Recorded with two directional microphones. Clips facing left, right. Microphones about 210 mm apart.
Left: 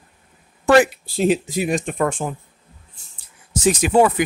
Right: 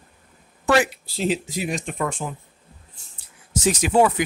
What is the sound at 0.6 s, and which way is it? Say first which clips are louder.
Speech: left 5 dB; 50° left (ahead or behind).